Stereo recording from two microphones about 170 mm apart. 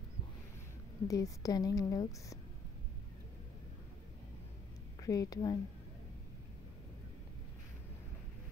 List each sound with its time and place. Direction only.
1.0 s a woman's voice: 20° left (ahead or behind)
5.0 s a woman's voice: 20° left (ahead or behind)